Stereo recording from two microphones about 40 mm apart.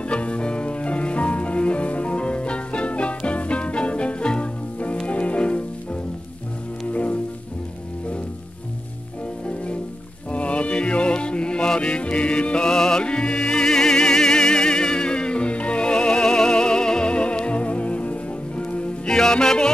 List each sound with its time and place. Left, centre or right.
0.0 s music: left
6.9 s music: left
10.3 s music: left
12.6 s music: centre
19.0 s music: centre